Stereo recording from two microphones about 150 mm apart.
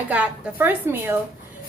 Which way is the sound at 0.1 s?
10° right (ahead or behind).